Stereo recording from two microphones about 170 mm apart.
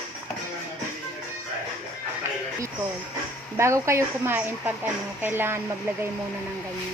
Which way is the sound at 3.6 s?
15° right (ahead or behind).